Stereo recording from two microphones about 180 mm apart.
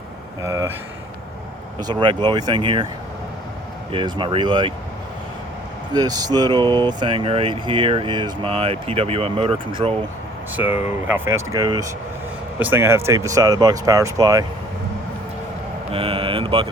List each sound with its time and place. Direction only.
0.4 s speech: 15° right (ahead or behind)
1.8 s speech: 25° right (ahead or behind)
3.9 s speech: 30° right (ahead or behind)
5.9 s speech: 20° right (ahead or behind)
10.8 s speech: 15° right (ahead or behind)
12.5 s speech: 10° right (ahead or behind)
15.9 s speech: 30° right (ahead or behind)